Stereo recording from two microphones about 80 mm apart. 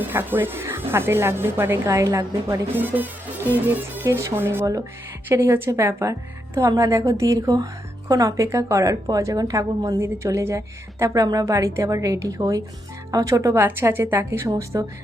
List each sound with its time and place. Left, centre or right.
0.0 s speech: right
2.7 s music: right
4.0 s a woman's voice: right
10.0 s a woman's voice: right
13.5 s speech: right